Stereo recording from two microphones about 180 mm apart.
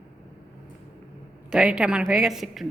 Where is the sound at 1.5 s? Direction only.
5° right (ahead or behind).